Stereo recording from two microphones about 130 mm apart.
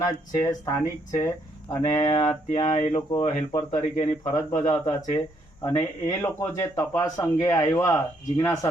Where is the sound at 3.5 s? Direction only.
35° left (ahead or behind).